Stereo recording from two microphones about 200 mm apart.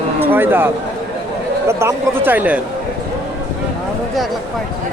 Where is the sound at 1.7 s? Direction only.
15° right (ahead or behind).